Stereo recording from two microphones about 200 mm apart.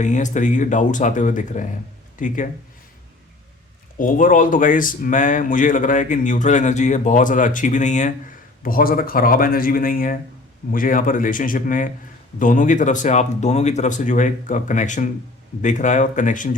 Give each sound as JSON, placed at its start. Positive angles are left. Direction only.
{"t": 0.0, "sound": "speech", "side_deg": 35}
{"t": 3.9, "sound": "speech", "side_deg": 40}